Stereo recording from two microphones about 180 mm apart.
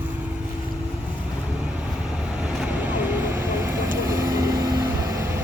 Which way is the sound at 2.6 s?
10° right (ahead or behind).